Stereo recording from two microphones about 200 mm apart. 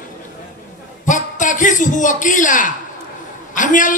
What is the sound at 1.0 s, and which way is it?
A man's voice, 40° left (ahead or behind).